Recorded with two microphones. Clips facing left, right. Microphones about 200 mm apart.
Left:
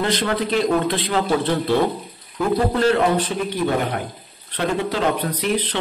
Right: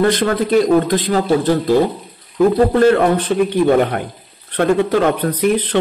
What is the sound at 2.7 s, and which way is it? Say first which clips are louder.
Speech: right 6 dB; 50° right (ahead or behind).